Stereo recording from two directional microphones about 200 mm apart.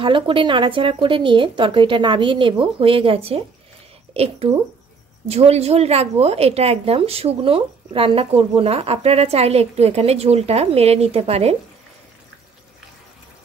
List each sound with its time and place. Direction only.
0.0 s speech: 25° right (ahead or behind)